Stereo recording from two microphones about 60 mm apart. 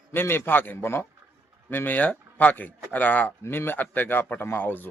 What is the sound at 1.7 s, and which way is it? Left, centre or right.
Speech, left.